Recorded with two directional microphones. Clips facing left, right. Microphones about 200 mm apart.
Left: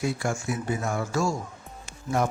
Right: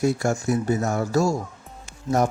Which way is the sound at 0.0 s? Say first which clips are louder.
Right 6 dB; 40° right (ahead or behind).